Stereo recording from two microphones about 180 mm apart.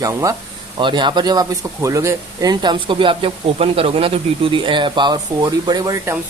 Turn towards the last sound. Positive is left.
turn(degrees=-20)  # may be behind; listen again after turning